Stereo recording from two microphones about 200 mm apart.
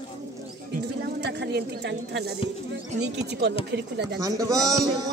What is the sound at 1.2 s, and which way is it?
Speech, 55° right (ahead or behind).